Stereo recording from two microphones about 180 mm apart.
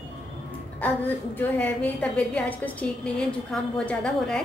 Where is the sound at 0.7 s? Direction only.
10° left (ahead or behind).